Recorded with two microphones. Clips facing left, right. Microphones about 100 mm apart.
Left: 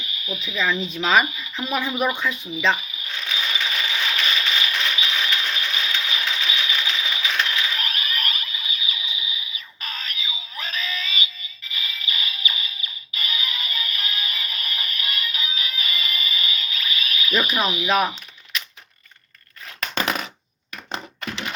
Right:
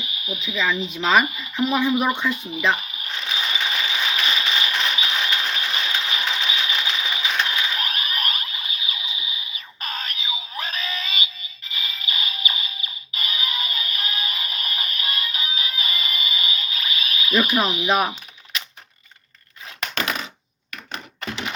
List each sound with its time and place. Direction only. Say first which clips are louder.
0.0 s a sound: even; 35° left (ahead or behind)
0.4 s a woman's voice: even; centre (ahead or behind)
3.2 s a sound: right 1 dB; 25° right (ahead or behind)
9.8 s synthetic singing: right 2 dB; 40° right (ahead or behind)
11.7 s music: right 1 dB; 35° right (ahead or behind)
17.8 s speech: left 2 dB; 15° right (ahead or behind)